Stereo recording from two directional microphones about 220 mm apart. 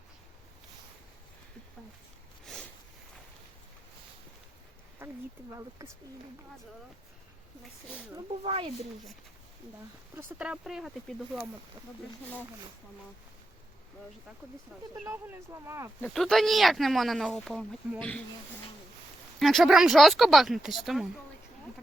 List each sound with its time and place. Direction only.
5.0 s a sound: 10° right (ahead or behind)
5.5 s speech: 10° right (ahead or behind)
8.1 s speech: 25° right (ahead or behind)
10.2 s speech: 5° right (ahead or behind)
14.9 s speech: 10° right (ahead or behind)
16.0 s speech: 5° left (ahead or behind)
19.4 s speech: centre (ahead or behind)